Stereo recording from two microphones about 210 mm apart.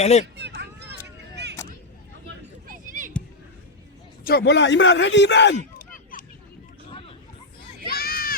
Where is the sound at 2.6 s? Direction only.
40° right (ahead or behind).